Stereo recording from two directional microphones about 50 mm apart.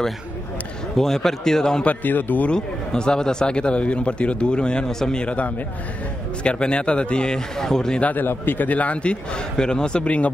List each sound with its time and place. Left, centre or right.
0.9 s a man's voice: centre
1.9 s a man's voice: left
2.5 s a man's voice: centre
8.0 s a man's voice: left